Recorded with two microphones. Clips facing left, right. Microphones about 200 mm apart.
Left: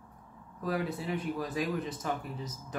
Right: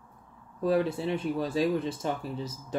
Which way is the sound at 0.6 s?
30° right (ahead or behind).